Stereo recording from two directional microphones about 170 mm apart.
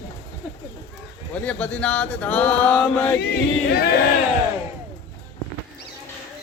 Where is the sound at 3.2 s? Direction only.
70° left (ahead or behind).